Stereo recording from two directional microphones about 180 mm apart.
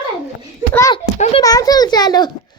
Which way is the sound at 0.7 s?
15° left (ahead or behind).